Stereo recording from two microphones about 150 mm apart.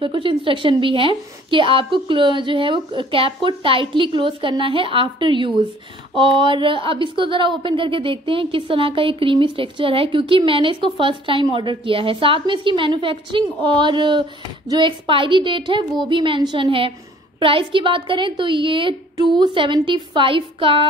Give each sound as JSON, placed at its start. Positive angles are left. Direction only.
{"t": 0.0, "sound": "a woman's voice", "side_deg": -35}